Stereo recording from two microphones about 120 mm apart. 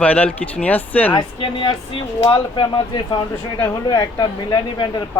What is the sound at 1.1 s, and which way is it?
Speech, 45° left (ahead or behind).